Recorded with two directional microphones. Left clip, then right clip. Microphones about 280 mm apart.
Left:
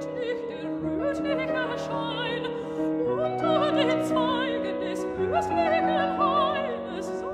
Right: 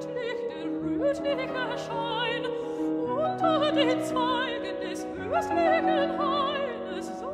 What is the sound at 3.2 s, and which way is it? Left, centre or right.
Music, right.